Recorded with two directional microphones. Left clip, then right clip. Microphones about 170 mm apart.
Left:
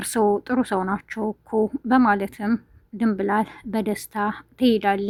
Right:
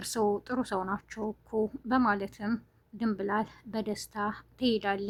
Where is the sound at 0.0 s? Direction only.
25° left (ahead or behind).